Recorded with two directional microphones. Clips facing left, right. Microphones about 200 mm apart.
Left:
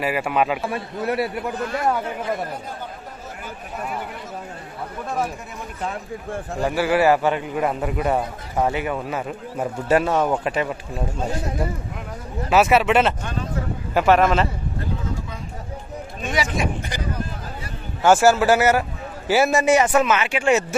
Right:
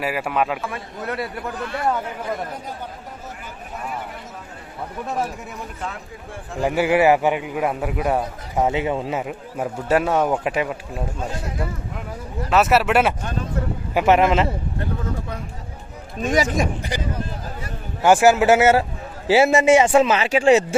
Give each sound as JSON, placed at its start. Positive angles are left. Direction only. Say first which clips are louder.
{"t": 0.0, "sound": "speech", "louder": "left 1 dB", "side_deg": 0}
{"t": 0.6, "sound": "a man's voice", "louder": "left 4 dB", "side_deg": 25}
{"t": 6.6, "sound": "a man's voice", "louder": "right 2 dB", "side_deg": -20}
{"t": 8.5, "sound": "a man's voice", "louder": "right 2 dB", "side_deg": -20}
{"t": 9.6, "sound": "a man's voice", "louder": "left 1 dB", "side_deg": -5}
{"t": 12.4, "sound": "speech", "louder": "left 1 dB", "side_deg": 0}
{"t": 13.9, "sound": "a man's voice", "louder": "even", "side_deg": -15}
{"t": 16.2, "sound": "a man's voice", "louder": "right 5 dB", "side_deg": -40}
{"t": 18.0, "sound": "a man's voice", "louder": "right 1 dB", "side_deg": -15}